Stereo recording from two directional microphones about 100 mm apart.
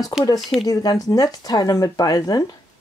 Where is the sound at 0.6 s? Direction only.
35° left (ahead or behind).